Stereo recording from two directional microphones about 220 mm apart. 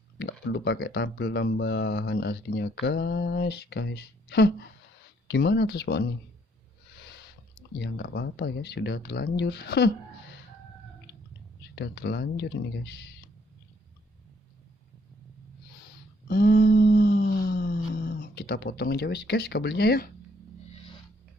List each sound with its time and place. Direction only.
0.2 s speech: 50° left (ahead or behind)
7.8 s speech: 50° left (ahead or behind)
11.7 s speech: 50° left (ahead or behind)
16.3 s a sound: 40° left (ahead or behind)